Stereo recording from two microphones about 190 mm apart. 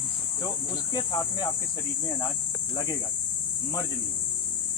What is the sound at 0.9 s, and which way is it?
Speech, 20° left (ahead or behind).